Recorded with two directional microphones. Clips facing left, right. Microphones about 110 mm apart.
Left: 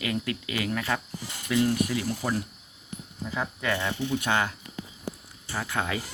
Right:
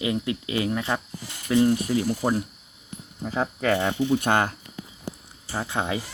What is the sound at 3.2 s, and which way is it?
Speech, 40° right (ahead or behind).